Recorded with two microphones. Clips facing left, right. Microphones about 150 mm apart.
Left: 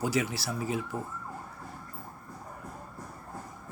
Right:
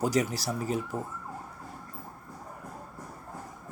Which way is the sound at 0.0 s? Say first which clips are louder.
Right 3 dB; 40° right (ahead or behind).